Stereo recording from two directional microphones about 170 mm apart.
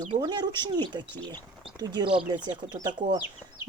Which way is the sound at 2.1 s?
5° right (ahead or behind).